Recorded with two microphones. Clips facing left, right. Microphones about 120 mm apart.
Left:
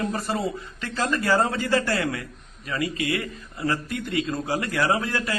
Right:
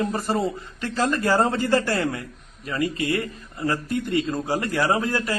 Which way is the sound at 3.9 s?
40° right (ahead or behind).